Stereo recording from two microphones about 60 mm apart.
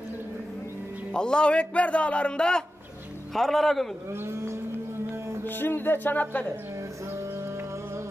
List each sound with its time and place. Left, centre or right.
1.1 s a man's voice: centre
3.3 s a man's voice: centre
4.1 s speech: right
5.4 s speech: left